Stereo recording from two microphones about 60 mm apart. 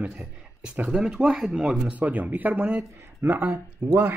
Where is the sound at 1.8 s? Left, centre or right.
Right.